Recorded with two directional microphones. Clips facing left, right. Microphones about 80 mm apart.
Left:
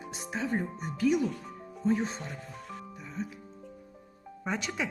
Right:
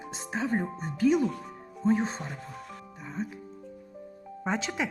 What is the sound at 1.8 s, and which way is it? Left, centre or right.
Speech, right.